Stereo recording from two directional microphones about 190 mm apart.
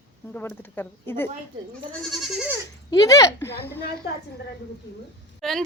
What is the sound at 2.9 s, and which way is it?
Speech, 20° left (ahead or behind).